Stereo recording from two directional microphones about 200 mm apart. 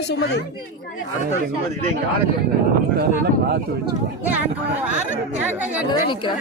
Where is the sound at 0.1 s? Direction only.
55° left (ahead or behind).